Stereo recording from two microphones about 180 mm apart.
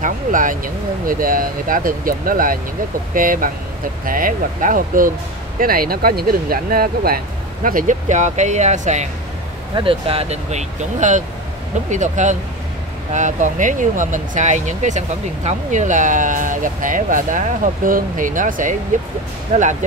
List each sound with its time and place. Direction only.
0.0 s speech: 45° right (ahead or behind)
9.8 s speech: 30° right (ahead or behind)